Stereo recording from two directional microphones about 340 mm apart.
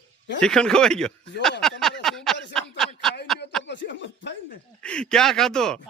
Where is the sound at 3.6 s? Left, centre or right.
Left.